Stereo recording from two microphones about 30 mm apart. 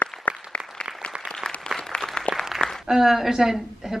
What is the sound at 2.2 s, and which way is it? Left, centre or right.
Applause, centre.